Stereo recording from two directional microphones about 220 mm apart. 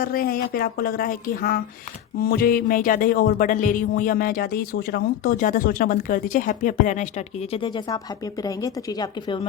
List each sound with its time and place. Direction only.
0.0 s speech: 40° left (ahead or behind); by 9.5 s 20° left (ahead or behind)